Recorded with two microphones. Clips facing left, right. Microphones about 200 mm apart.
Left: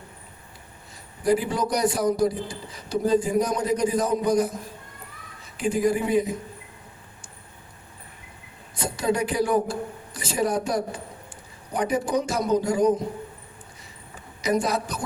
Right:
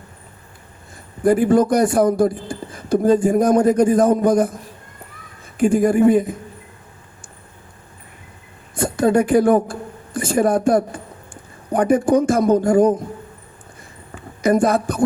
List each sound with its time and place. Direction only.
1.2 s speech: 50° right (ahead or behind)
8.7 s speech: 50° right (ahead or behind)
14.1 s a woman's voice: 50° right (ahead or behind)